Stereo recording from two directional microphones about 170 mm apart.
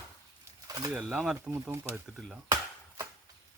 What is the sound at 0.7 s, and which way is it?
Bird, 20° right (ahead or behind).